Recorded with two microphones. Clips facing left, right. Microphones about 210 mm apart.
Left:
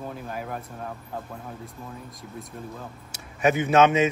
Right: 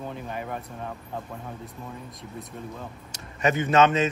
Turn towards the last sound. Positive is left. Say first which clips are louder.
# left 2 dB
turn(degrees=10)  # may be behind; listen again after turning